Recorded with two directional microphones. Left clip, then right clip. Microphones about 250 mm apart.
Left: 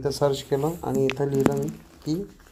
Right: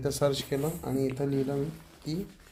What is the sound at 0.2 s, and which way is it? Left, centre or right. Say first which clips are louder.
Speech: left 5 dB; centre.